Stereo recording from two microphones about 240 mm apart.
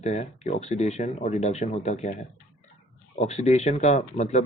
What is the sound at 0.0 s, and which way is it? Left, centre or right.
Speech, left.